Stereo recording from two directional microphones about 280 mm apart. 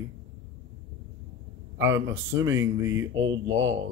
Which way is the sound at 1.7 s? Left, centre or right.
Right.